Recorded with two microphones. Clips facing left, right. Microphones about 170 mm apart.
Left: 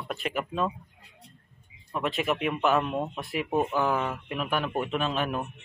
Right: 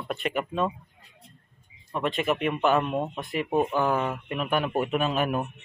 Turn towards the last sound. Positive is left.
turn(degrees=-5)  # may be behind; listen again after turning